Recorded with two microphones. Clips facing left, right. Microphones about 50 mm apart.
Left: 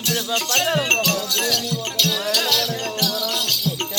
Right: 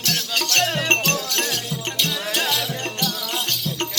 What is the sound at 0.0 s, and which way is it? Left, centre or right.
Music, right.